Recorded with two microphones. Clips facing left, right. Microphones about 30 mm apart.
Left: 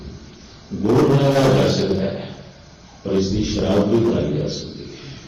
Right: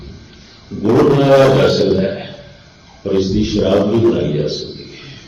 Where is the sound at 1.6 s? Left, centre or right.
Right.